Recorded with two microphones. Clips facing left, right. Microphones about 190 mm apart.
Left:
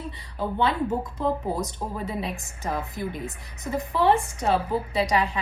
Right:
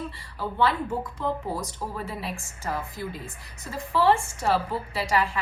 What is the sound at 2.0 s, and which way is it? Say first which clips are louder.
A woman's voice: left 3 dB; 20° left (ahead or behind).